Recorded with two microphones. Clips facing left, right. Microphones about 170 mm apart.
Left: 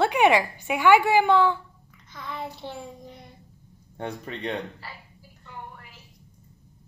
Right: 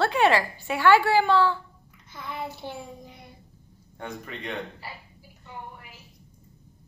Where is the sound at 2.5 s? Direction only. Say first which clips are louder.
Even; 10° right (ahead or behind).